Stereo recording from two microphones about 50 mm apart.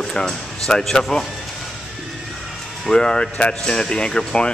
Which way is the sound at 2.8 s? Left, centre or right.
Centre.